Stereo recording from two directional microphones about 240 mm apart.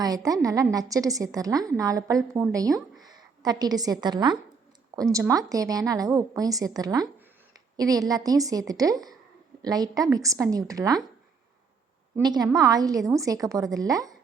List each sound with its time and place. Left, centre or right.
0.3 s a woman's voice: centre
12.1 s a woman's voice: centre